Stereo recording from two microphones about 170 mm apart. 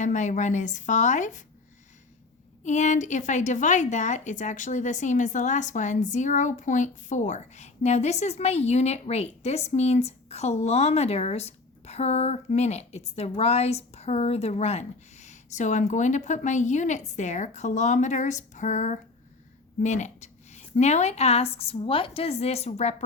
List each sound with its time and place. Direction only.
0.0 s a woman's voice: 45° left (ahead or behind)
2.6 s a woman's voice: 45° left (ahead or behind)